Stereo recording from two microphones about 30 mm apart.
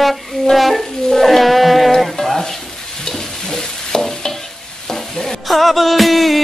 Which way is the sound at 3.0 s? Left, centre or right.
Centre.